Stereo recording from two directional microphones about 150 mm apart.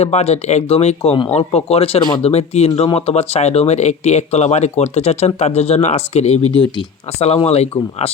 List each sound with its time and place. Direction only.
0.0 s speech: 45° left (ahead or behind); by 2.2 s 30° left (ahead or behind)
2.2 s speech: 45° left (ahead or behind)